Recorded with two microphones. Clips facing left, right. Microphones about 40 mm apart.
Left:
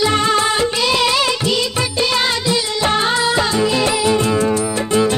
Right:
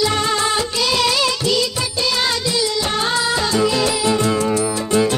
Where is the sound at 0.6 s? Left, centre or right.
Left.